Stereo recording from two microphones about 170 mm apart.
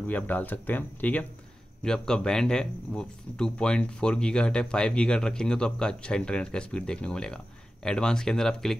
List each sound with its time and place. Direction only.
0.0 s speech: 10° left (ahead or behind)